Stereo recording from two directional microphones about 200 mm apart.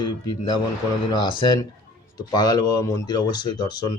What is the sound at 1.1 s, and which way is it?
Speech, 25° left (ahead or behind).